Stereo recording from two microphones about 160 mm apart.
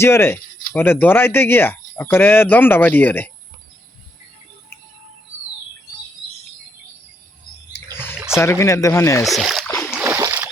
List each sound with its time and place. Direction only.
0.0 s speech: 15° left (ahead or behind)
8.4 s speech: 15° left (ahead or behind)
9.2 s speech: centre (ahead or behind)
9.6 s splash: 15° left (ahead or behind)
9.9 s splash: 15° right (ahead or behind)